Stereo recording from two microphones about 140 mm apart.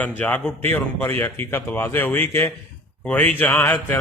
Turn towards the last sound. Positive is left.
turn(degrees=15)  # may be behind; listen again after turning